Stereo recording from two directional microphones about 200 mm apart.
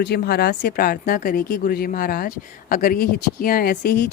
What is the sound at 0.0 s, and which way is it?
A woman's voice, 55° left (ahead or behind).